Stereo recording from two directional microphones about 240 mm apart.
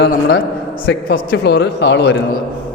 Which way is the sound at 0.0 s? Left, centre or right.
Left.